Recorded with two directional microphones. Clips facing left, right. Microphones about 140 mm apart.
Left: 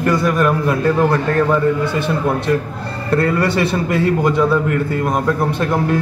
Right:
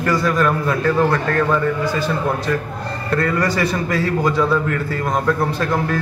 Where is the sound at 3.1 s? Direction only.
25° left (ahead or behind).